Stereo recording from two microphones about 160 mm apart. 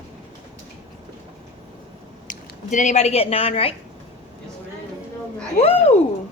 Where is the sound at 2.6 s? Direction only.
50° left (ahead or behind).